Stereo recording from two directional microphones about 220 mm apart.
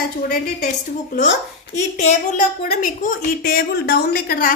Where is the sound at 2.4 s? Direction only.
35° left (ahead or behind).